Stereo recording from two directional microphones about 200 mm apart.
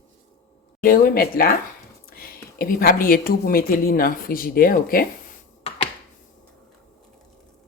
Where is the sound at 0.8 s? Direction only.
45° left (ahead or behind).